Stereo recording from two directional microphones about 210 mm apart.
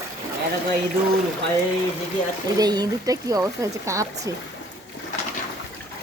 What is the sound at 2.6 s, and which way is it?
Speech, 20° right (ahead or behind).